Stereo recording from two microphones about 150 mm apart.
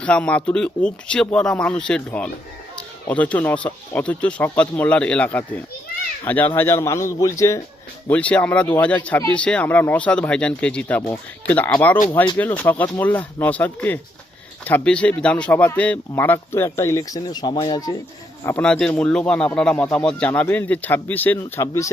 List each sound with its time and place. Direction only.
0.0 s a man's voice: 10° left (ahead or behind)
8.0 s a man's voice: 10° left (ahead or behind); by 17.9 s 30° left (ahead or behind)
18.4 s a man's voice: 10° left (ahead or behind)